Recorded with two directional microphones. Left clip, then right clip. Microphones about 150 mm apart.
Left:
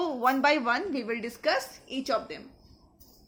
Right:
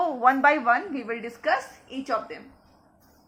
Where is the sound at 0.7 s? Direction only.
90° left.